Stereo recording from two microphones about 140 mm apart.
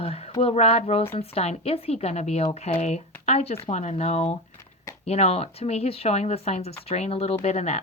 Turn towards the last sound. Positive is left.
turn(degrees=50)  # may be behind; listen again after turning